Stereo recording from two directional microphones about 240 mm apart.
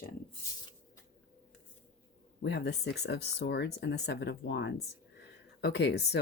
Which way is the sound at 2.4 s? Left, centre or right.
Left.